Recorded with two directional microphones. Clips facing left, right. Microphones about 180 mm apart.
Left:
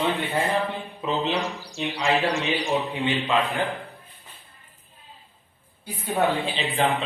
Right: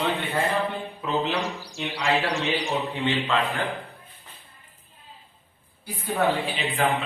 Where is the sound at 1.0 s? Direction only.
20° left (ahead or behind).